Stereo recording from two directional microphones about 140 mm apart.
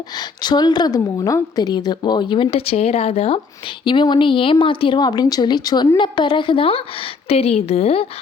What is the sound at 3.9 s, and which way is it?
A woman's voice, 35° left (ahead or behind).